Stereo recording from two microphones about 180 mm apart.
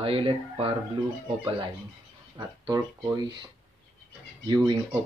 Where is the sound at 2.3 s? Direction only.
20° right (ahead or behind).